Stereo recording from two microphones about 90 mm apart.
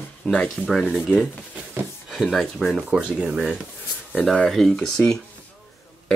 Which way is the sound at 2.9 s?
10° right (ahead or behind).